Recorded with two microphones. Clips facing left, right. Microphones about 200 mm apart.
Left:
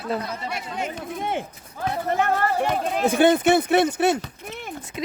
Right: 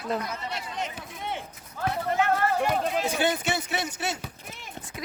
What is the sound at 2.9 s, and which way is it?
Speech, 55° left (ahead or behind).